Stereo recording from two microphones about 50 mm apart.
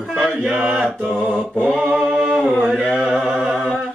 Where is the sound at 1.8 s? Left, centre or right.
Centre.